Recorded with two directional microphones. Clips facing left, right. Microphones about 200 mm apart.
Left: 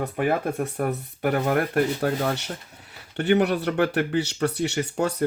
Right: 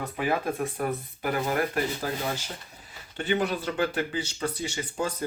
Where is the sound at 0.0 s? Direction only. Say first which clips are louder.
Left 4 dB; 60° left (ahead or behind).